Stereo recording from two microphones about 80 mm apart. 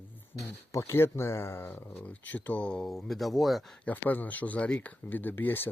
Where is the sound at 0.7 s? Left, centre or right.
Left.